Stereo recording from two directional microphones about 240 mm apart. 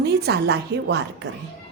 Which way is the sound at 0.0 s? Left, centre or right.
Right.